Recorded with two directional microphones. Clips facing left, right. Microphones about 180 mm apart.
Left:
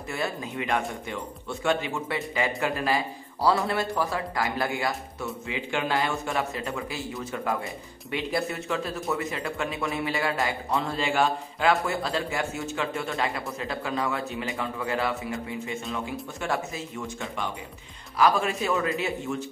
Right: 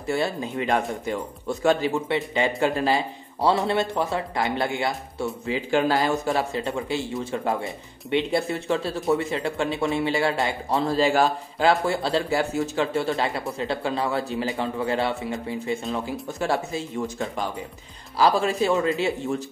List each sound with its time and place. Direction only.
0.1 s a man's voice: 30° right (ahead or behind)
2.0 s a man's voice: 25° right (ahead or behind)